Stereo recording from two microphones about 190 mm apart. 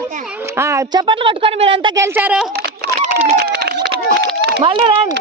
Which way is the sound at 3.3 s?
55° right (ahead or behind).